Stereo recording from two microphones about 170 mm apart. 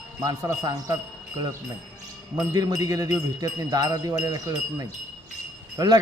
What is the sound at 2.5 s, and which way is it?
Speech, 20° right (ahead or behind).